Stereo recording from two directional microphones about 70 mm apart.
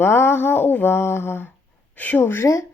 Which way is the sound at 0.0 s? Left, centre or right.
Left.